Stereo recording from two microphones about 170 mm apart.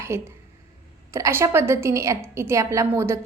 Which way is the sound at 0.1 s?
15° right (ahead or behind).